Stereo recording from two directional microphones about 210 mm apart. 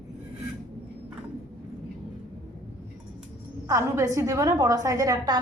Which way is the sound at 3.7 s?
15° right (ahead or behind).